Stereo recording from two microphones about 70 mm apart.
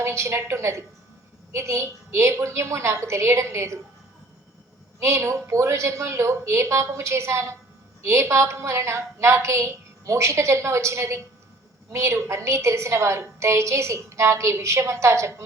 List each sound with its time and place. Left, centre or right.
0.0 s a woman's voice: right
4.9 s a woman's voice: right